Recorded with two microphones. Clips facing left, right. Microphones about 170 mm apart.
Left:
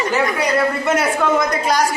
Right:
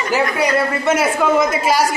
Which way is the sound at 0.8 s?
5° right (ahead or behind).